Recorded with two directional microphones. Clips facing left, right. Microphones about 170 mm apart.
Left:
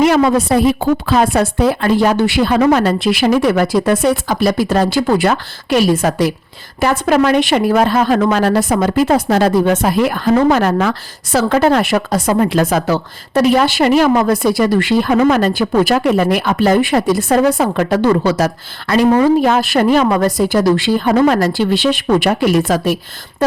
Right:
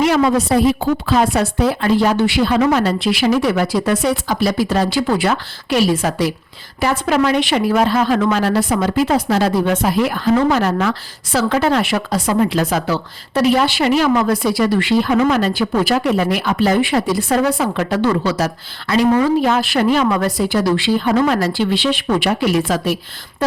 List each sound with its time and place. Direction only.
0.0 s a woman's voice: 55° left (ahead or behind)